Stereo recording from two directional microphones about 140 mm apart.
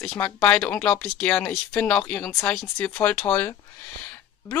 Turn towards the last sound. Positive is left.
turn(degrees=10)  # may be behind; listen again after turning